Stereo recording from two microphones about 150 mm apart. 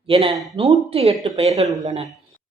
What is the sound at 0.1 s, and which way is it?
Speech, 40° right (ahead or behind).